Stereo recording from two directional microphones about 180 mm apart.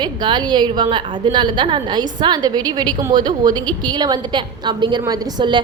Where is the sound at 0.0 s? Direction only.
25° right (ahead or behind).